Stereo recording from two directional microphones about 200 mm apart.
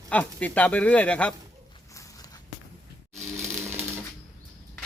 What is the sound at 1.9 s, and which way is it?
Walk, 15° left (ahead or behind).